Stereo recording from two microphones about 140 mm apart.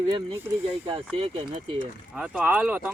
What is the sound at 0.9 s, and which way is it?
Speech, 40° right (ahead or behind).